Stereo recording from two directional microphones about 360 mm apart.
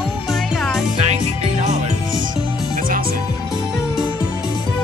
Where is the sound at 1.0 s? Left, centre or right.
Centre.